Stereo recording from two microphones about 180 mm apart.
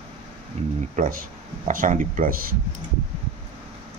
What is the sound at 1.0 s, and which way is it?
Speech, 45° right (ahead or behind).